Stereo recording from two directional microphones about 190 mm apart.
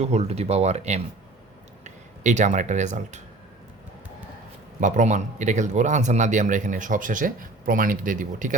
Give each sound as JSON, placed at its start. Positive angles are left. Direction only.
{"t": 0.0, "sound": "a man's voice", "side_deg": -35}
{"t": 4.8, "sound": "a man's voice", "side_deg": -40}